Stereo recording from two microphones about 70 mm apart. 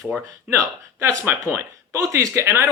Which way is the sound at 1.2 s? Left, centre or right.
Right.